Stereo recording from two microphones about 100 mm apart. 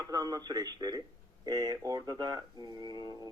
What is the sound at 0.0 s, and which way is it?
Speech, 40° right (ahead or behind).